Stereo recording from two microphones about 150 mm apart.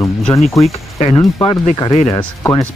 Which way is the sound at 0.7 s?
45° left (ahead or behind).